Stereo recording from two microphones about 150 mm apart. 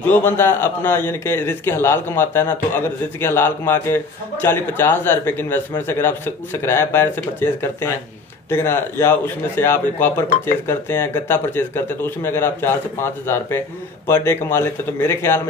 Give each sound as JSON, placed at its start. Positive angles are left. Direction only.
{"t": 0.0, "sound": "a man's voice", "side_deg": 15}